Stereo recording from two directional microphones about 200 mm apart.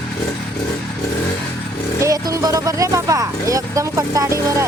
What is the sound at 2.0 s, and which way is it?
Speech, 15° right (ahead or behind).